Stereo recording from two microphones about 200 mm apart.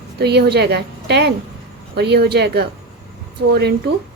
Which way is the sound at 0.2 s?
55° right (ahead or behind).